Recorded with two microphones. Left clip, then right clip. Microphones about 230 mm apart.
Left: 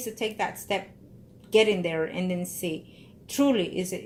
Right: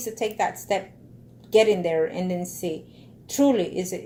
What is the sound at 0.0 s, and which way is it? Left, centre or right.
Speech, left.